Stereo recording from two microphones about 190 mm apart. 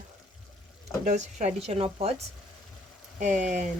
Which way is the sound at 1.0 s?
40° right (ahead or behind).